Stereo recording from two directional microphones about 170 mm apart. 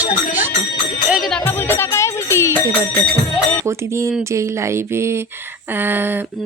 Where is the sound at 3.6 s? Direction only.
15° right (ahead or behind).